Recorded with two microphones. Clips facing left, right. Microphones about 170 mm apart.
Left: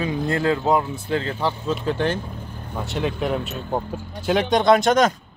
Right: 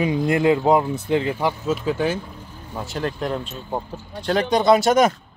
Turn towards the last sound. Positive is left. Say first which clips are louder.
# right 1 dB
turn(degrees=-5)  # may be behind; listen again after turning